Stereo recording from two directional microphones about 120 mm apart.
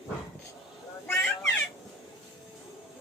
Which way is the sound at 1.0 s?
10° left (ahead or behind).